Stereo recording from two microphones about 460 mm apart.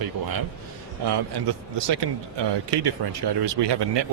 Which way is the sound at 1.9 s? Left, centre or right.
Right.